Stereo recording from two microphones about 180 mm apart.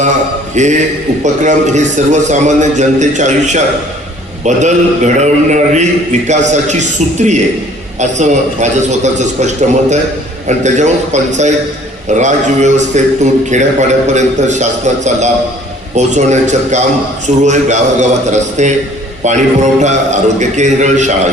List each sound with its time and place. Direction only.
0.5 s a man's voice: 40° right (ahead or behind)